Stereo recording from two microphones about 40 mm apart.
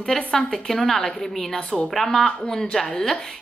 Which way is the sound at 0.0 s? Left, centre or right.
Centre.